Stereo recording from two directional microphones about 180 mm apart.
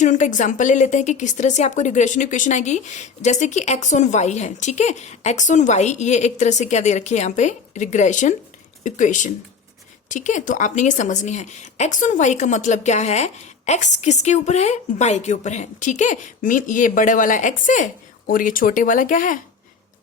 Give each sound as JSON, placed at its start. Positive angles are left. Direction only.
{"t": 0.0, "sound": "speech", "side_deg": 45}